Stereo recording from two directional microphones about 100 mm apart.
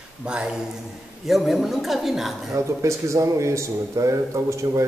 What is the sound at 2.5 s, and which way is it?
Speech, 30° right (ahead or behind).